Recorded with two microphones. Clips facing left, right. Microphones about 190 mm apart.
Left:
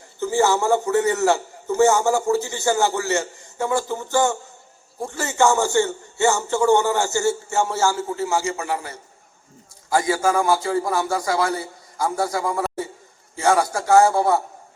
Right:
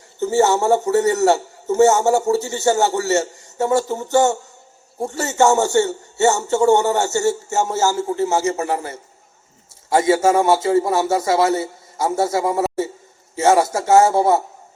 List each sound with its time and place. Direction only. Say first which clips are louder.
0.2 s a man's voice: right 3 dB; 20° right (ahead or behind)
0.9 s speech: right 3 dB; 40° right (ahead or behind)
1.3 s a man's voice: right 3 dB; 20° right (ahead or behind)
7.5 s speech: right 2 dB; 40° right (ahead or behind)
7.9 s a man's voice: right 4 dB; 20° right (ahead or behind)
8.4 s speech: right 5 dB; 40° right (ahead or behind)
9.9 s a man's voice: right 5 dB; 25° right (ahead or behind)